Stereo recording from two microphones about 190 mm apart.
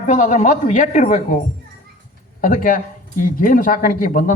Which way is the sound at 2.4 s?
45° left (ahead or behind).